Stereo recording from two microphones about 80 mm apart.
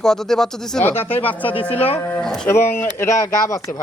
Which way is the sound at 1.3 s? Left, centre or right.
Left.